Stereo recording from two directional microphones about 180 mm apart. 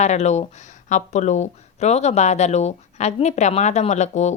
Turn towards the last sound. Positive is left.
turn(degrees=40)  # may be behind; listen again after turning